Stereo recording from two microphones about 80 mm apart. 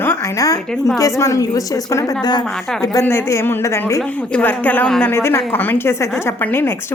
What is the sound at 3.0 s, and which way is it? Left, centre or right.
A woman's voice, left.